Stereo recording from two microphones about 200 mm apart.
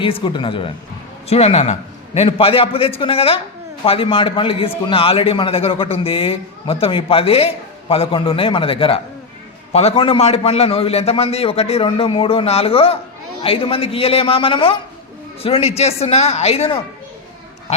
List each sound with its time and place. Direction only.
0.0 s a man's voice: 25° left (ahead or behind)
17.7 s pig: 30° left (ahead or behind)